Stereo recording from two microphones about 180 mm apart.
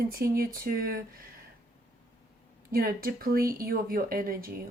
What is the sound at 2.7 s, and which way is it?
Speech, 55° right (ahead or behind).